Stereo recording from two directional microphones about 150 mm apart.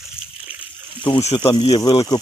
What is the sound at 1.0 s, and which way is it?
Speech, 40° left (ahead or behind).